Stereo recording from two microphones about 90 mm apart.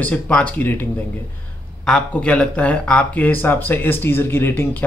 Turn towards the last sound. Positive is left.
turn(degrees=25)  # may be behind; listen again after turning